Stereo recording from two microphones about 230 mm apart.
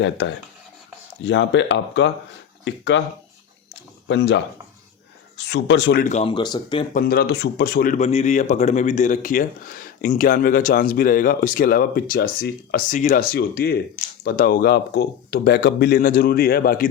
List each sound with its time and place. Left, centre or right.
0.0 s speech: left
4.1 s speech: left
5.4 s speech: left
6.1 s speech: left
6.9 s speech: left